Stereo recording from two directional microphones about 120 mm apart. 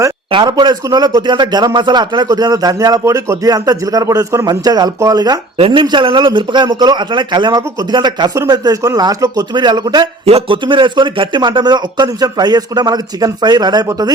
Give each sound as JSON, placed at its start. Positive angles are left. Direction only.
{"t": 0.3, "sound": "a man's voice", "side_deg": -40}
{"t": 5.5, "sound": "speech", "side_deg": -50}
{"t": 5.8, "sound": "a man's voice", "side_deg": -40}
{"t": 10.2, "sound": "a man's voice", "side_deg": -50}